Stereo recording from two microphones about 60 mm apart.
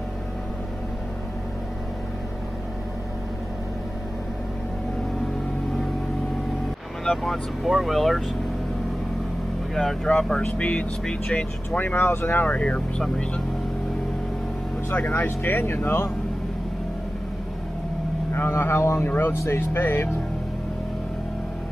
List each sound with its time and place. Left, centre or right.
7.1 s speech: centre
10.2 s speech: centre
10.6 s speech: left
11.8 s speech: left
12.4 s speech: left
14.9 s speech: left
18.3 s speech: left